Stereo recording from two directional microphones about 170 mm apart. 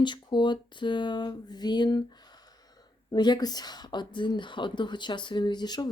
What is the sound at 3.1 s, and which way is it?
Speech, 25° left (ahead or behind).